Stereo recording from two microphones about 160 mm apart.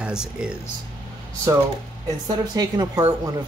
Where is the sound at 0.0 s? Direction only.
5° right (ahead or behind).